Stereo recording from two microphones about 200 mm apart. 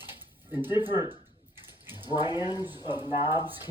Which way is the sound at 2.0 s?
20° left (ahead or behind).